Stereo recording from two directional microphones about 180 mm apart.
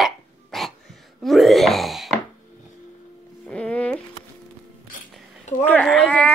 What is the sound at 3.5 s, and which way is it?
Music, 5° left (ahead or behind).